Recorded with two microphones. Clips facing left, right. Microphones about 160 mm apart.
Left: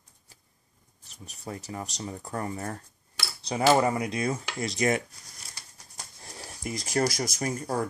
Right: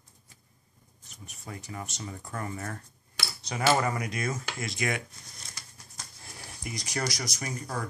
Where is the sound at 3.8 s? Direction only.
30° left (ahead or behind).